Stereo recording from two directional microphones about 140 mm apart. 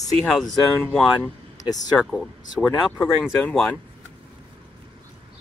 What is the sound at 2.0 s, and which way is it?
Speech, centre (ahead or behind).